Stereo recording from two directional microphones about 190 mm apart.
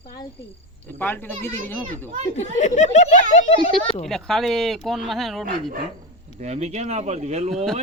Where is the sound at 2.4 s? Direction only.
40° left (ahead or behind).